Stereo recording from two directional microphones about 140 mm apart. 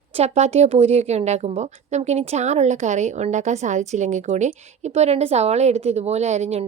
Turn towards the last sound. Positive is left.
turn(degrees=-55)  # may be behind; listen again after turning